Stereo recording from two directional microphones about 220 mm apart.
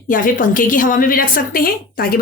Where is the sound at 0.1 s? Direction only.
40° left (ahead or behind).